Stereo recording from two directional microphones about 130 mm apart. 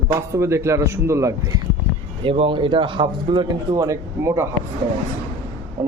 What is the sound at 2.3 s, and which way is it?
A man's voice, 45° right (ahead or behind).